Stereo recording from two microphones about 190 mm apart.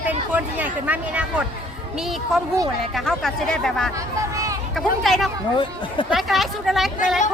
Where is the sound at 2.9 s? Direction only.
5° left (ahead or behind).